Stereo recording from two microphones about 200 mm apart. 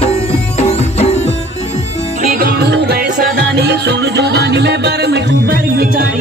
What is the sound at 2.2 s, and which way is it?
Music, 45° right (ahead or behind).